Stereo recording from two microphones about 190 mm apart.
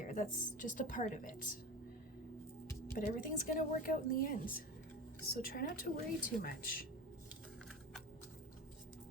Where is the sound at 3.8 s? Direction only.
45° left (ahead or behind).